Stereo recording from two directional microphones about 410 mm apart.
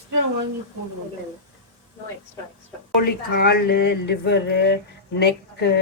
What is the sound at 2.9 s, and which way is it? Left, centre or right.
Speech, left.